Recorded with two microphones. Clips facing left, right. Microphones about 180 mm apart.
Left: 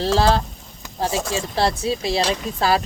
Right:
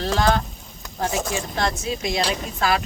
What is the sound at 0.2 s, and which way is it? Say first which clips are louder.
Speech: left 2 dB; 30° left (ahead or behind).